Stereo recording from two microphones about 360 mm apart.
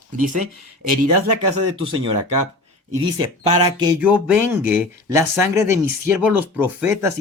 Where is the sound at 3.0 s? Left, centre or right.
Centre.